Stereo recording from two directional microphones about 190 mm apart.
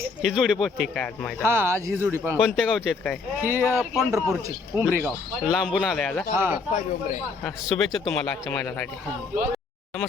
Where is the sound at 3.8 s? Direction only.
Centre (ahead or behind).